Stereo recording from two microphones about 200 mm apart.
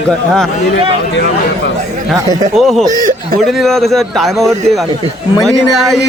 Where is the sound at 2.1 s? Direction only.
15° right (ahead or behind).